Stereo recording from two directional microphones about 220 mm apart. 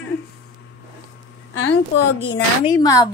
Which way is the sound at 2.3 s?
20° left (ahead or behind).